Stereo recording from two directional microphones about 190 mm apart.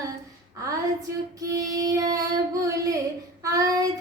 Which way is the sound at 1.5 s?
20° right (ahead or behind).